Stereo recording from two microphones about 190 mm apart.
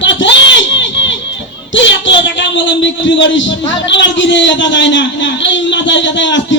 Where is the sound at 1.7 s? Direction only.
75° left (ahead or behind).